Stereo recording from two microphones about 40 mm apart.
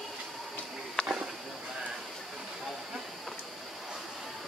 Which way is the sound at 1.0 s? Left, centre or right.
Centre.